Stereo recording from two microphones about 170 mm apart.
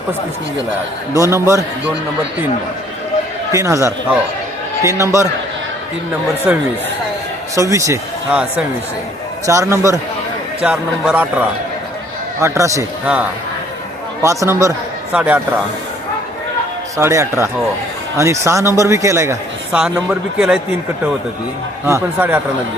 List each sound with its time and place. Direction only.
1.1 s a man's voice: 15° right (ahead or behind)
3.5 s a man's voice: 15° right (ahead or behind)
6.5 s a man's voice: 10° right (ahead or behind)
9.5 s a man's voice: 15° right (ahead or behind)
10.6 s a man's voice: 5° right (ahead or behind)
14.2 s a man's voice: 20° right (ahead or behind)
17.0 s a man's voice: 15° right (ahead or behind)
19.7 s a man's voice: 5° right (ahead or behind)
21.8 s a man's voice: 15° right (ahead or behind)